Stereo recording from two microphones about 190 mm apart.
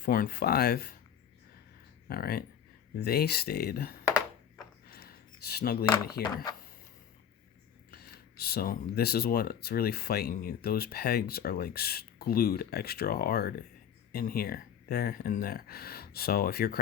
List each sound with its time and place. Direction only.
0.0 s speech: 50° left (ahead or behind)
2.0 s speech: 50° left (ahead or behind)
4.9 s a sound: 55° left (ahead or behind)
6.3 s speech: 20° left (ahead or behind)
7.9 s speech: 55° left (ahead or behind)